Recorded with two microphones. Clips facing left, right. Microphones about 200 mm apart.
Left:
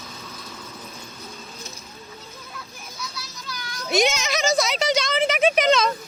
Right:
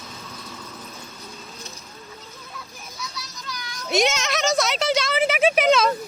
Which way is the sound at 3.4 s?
Centre (ahead or behind).